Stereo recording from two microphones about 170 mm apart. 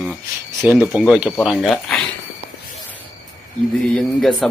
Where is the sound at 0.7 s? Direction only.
10° right (ahead or behind).